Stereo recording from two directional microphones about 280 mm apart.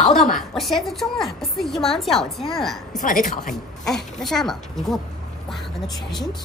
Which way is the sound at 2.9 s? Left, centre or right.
Left.